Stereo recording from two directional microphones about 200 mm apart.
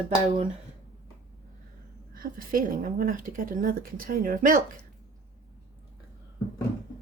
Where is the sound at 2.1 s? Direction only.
45° right (ahead or behind).